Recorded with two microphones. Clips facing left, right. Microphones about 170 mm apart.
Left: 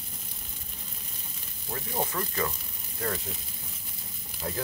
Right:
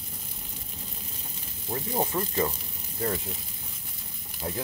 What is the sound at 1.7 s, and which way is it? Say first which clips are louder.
Speech: right 3 dB; 20° right (ahead or behind).